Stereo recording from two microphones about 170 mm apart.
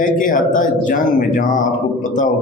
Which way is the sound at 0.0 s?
50° left (ahead or behind).